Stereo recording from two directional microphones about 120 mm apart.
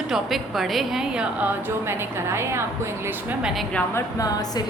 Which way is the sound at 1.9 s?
20° right (ahead or behind).